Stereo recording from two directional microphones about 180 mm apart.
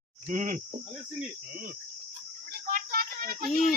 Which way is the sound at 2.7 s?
55° right (ahead or behind).